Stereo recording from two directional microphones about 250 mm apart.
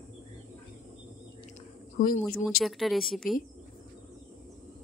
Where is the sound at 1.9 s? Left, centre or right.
Left.